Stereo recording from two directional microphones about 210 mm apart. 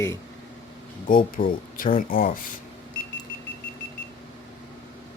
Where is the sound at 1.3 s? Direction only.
40° left (ahead or behind).